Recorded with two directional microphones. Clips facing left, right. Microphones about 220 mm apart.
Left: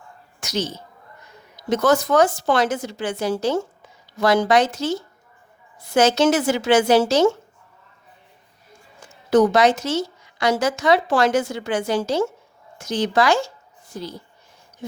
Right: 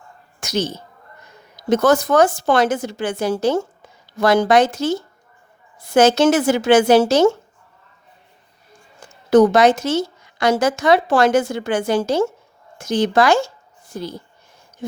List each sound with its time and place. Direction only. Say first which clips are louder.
0.3 s a sound: right 4 dB; 50° right (ahead or behind)
1.7 s speech: right 3 dB; 50° right (ahead or behind)
9.3 s speech: right 3 dB; 50° right (ahead or behind)